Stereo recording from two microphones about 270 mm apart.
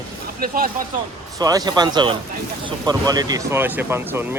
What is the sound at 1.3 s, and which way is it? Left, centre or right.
Speech, centre.